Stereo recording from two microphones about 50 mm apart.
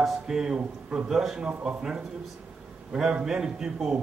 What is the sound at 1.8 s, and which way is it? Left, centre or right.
A man's voice, centre.